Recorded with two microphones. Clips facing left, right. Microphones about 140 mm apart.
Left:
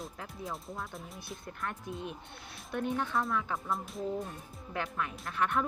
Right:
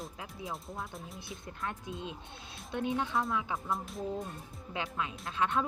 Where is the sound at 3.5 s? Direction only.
Centre (ahead or behind).